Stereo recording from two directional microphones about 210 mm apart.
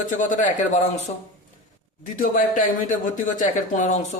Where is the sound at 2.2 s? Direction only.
40° left (ahead or behind).